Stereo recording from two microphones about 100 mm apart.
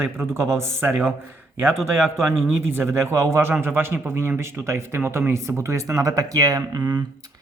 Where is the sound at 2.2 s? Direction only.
25° right (ahead or behind).